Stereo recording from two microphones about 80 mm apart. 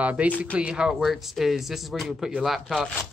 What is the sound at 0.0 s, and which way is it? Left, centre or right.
Speech, centre.